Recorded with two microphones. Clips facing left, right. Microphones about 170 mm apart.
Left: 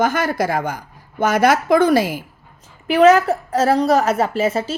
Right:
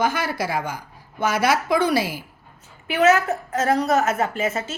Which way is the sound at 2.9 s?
35° left (ahead or behind).